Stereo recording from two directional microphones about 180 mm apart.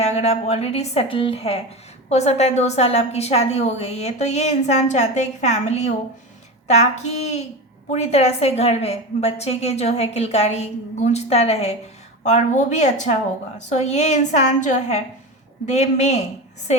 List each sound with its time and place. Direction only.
0.0 s a woman's voice: 35° left (ahead or behind)